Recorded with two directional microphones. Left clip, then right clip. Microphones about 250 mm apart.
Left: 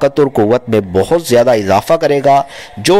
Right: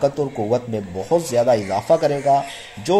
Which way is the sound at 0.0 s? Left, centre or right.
Left.